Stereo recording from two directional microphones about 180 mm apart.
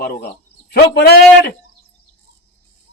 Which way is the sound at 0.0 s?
60° left (ahead or behind).